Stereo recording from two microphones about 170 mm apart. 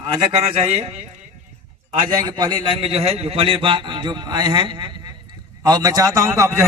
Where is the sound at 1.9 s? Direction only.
25° right (ahead or behind).